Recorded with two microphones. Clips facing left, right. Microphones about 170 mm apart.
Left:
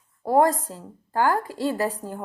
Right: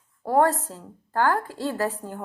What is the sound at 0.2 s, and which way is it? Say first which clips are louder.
Speech: left 1 dB; 10° left (ahead or behind).